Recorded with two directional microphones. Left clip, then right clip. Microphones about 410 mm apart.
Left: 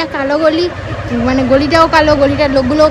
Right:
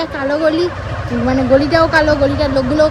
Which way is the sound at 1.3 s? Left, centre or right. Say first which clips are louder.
Left 1 dB; left.